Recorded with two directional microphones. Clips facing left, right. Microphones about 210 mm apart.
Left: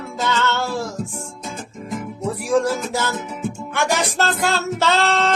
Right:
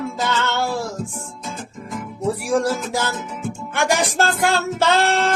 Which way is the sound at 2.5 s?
15° right (ahead or behind).